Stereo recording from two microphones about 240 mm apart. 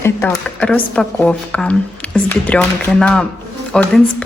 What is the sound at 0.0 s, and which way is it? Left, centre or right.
Speech, centre.